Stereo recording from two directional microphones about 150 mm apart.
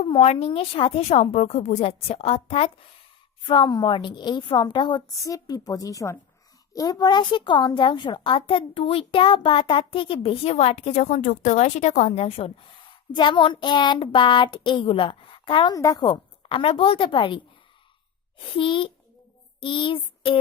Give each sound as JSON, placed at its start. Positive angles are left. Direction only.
{"t": 0.0, "sound": "a woman's voice", "side_deg": 40}
{"t": 3.4, "sound": "a woman's voice", "side_deg": 30}
{"t": 15.7, "sound": "a woman's voice", "side_deg": 25}
{"t": 18.5, "sound": "a woman's voice", "side_deg": 35}
{"t": 19.5, "sound": "child singing", "side_deg": 35}